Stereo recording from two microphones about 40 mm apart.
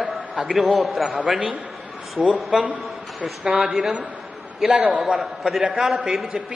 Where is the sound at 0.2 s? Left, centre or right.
Right.